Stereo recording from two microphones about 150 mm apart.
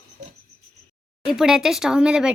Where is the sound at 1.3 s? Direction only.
5° right (ahead or behind).